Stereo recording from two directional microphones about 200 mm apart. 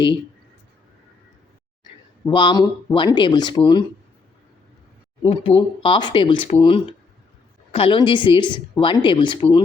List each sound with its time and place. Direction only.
2.2 s a woman's voice: 25° left (ahead or behind)
5.2 s a woman's voice: 25° left (ahead or behind)